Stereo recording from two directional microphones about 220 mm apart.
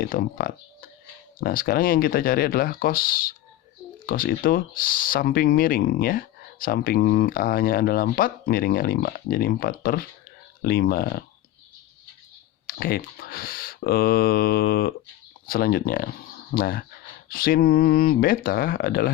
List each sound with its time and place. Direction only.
0.0 s speech: 45° left (ahead or behind)
12.6 s speech: 40° left (ahead or behind)